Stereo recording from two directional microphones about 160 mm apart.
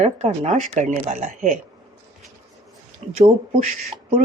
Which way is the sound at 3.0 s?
40° right (ahead or behind).